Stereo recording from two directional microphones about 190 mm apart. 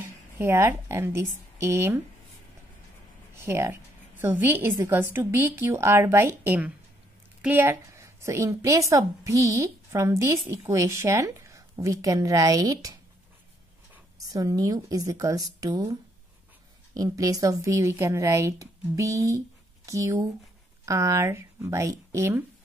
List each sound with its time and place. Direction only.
0.4 s a woman's voice: 10° right (ahead or behind)
3.3 s a woman's voice: 15° right (ahead or behind)
14.3 s a woman's voice: 20° right (ahead or behind)